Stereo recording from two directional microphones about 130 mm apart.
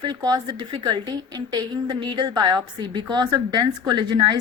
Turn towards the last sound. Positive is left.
turn(degrees=-35)  # may be behind; listen again after turning